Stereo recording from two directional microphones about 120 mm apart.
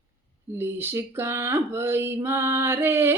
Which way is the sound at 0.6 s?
20° right (ahead or behind).